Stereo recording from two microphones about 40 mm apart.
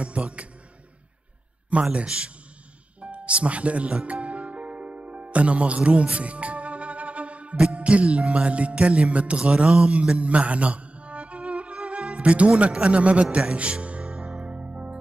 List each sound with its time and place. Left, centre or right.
0.2 s speech: right
1.7 s a man's voice: right
3.0 s music: right
9.4 s speech: right
10.1 s music: right
14.0 s music: centre
14.4 s music: right